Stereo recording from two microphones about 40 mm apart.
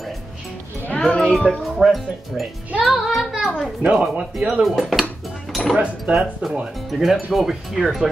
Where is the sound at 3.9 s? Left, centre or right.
Centre.